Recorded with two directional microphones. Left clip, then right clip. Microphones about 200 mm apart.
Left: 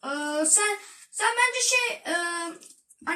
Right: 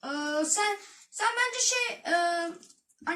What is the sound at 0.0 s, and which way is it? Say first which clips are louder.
Female singing: left 3 dB; 15° right (ahead or behind).